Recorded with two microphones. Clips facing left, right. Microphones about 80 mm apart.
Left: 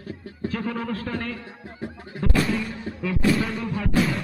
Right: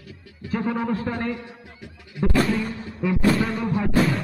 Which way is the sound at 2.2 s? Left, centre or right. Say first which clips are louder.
Right 3 dB; centre.